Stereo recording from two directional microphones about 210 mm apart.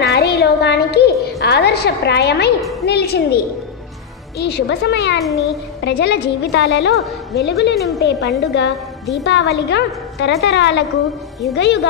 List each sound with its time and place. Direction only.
0.0 s a sound: 50° left (ahead or behind)
2.8 s a woman's voice: 50° left (ahead or behind)
4.4 s a woman's voice: 55° left (ahead or behind)
7.7 s a woman's voice: centre (ahead or behind)
8.0 s a woman's voice: 50° left (ahead or behind)